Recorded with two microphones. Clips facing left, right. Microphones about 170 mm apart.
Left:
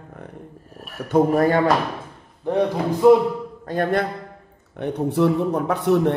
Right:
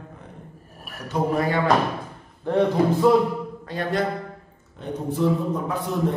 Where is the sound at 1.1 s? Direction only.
50° left (ahead or behind).